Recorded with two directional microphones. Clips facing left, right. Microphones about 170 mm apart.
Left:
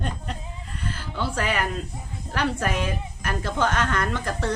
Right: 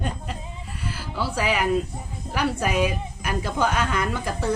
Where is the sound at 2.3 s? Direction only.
10° right (ahead or behind).